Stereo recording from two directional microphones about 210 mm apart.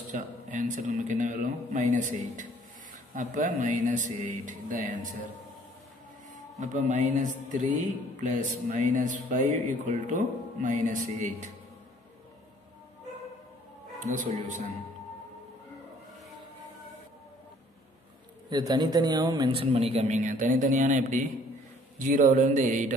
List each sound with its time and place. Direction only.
0.1 s a sound: 35° right (ahead or behind)
3.2 s speech: 35° right (ahead or behind)
6.6 s speech: 35° right (ahead or behind)
13.9 s speech: 35° right (ahead or behind)
18.5 s a man's voice: 20° right (ahead or behind); by 22.9 s 35° right (ahead or behind)